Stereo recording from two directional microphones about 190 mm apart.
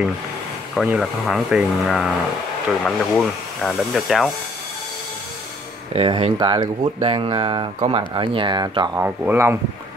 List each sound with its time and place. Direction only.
0.7 s speech: centre (ahead or behind)
5.9 s speech: 30° right (ahead or behind)
9.0 s speech: 10° right (ahead or behind)